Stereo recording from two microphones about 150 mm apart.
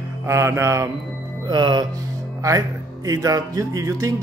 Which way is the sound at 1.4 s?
30° right (ahead or behind).